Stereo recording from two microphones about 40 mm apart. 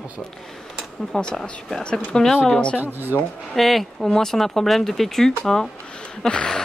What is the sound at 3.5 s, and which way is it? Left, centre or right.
Speech, centre.